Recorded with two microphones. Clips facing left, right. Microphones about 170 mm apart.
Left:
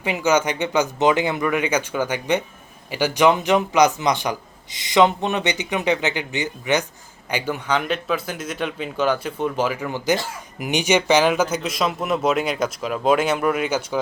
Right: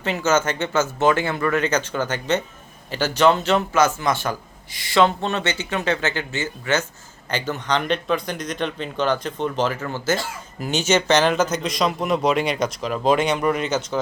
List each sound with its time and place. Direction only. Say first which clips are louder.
0.0 s a man's voice: left 1 dB; 15° left (ahead or behind)